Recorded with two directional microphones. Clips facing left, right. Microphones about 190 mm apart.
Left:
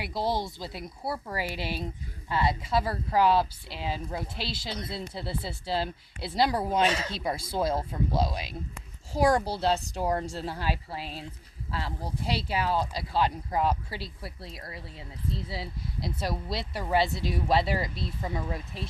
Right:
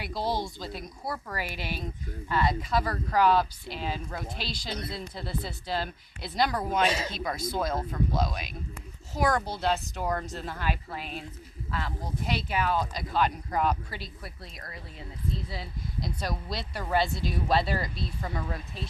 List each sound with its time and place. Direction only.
0.0 s speech: 25° left (ahead or behind)
6.8 s speech: 10° right (ahead or behind)
7.1 s speech: 30° left (ahead or behind)